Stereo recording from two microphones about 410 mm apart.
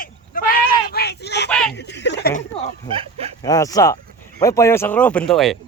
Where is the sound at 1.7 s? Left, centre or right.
Left.